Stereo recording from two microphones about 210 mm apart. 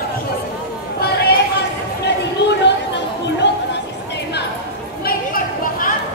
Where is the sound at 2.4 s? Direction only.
55° left (ahead or behind).